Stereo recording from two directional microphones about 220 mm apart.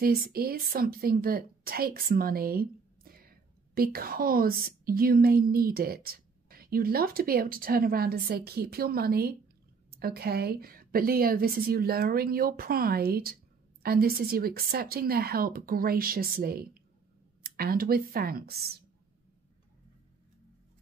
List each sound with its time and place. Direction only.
0.0 s a woman's voice: 40° right (ahead or behind)